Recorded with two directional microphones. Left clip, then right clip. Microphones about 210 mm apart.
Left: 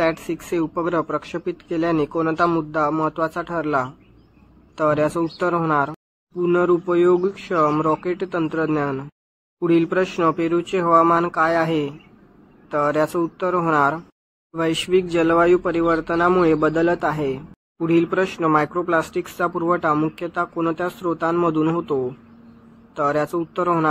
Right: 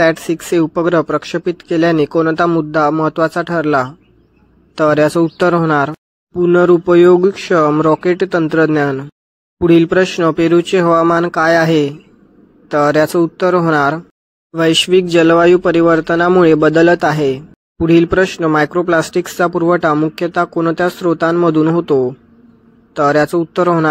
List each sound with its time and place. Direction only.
0.0 s speech: 30° right (ahead or behind)